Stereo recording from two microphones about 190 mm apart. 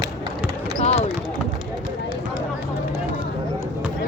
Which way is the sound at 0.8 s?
35° left (ahead or behind).